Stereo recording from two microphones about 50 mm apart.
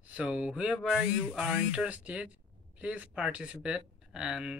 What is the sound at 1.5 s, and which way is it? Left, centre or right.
Speech, right.